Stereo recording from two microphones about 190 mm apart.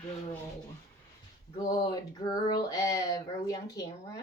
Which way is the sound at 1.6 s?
20° left (ahead or behind).